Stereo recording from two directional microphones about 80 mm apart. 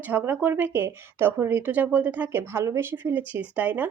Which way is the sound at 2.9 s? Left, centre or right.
Right.